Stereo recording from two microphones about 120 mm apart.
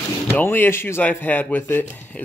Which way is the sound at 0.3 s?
15° left (ahead or behind).